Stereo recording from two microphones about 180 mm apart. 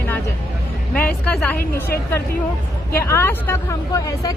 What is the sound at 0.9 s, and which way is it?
Speech, 5° left (ahead or behind).